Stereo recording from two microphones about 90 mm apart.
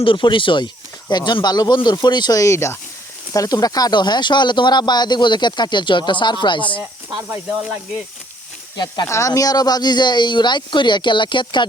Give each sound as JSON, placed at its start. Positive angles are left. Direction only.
{"t": 0.0, "sound": "speech", "side_deg": 65}
{"t": 2.4, "sound": "speech", "side_deg": 35}
{"t": 7.2, "sound": "speech", "side_deg": -25}
{"t": 8.7, "sound": "speech", "side_deg": 50}
{"t": 9.0, "sound": "speech", "side_deg": 35}